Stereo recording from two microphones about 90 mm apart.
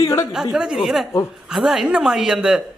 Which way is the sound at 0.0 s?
30° left (ahead or behind).